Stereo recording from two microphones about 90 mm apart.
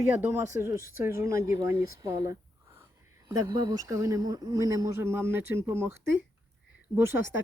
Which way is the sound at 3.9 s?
35° right (ahead or behind).